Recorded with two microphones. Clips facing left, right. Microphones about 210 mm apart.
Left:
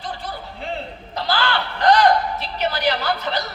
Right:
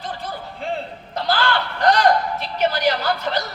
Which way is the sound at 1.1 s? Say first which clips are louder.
Right 2 dB; 50° right (ahead or behind).